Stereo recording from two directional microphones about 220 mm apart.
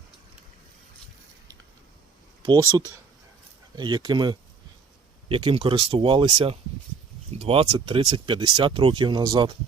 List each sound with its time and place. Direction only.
2.4 s speech: 20° right (ahead or behind)
3.8 s speech: 20° right (ahead or behind)